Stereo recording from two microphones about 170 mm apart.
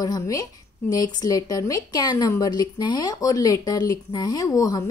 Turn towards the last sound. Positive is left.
turn(degrees=20)  # may be behind; listen again after turning